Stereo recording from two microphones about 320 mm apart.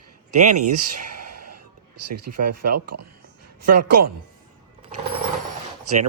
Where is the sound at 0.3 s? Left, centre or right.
Right.